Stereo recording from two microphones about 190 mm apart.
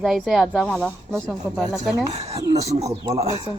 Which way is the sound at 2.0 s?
35° right (ahead or behind).